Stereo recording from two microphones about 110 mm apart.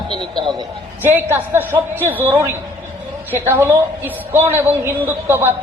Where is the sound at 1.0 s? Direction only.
20° right (ahead or behind).